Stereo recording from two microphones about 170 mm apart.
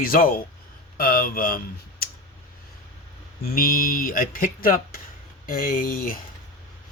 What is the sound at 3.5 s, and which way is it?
Speech, 55° left (ahead or behind).